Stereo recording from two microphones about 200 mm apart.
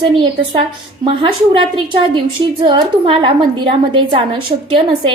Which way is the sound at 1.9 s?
25° right (ahead or behind).